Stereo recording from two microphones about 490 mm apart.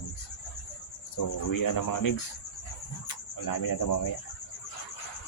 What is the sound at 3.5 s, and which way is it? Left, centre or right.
Speech, left.